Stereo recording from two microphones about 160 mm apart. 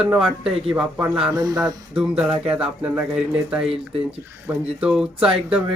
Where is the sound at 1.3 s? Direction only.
20° right (ahead or behind).